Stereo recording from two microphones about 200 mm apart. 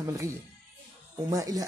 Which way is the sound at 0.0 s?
15° right (ahead or behind).